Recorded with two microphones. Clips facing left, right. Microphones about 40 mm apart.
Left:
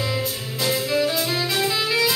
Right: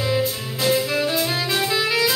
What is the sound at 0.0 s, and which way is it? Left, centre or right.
Music, centre.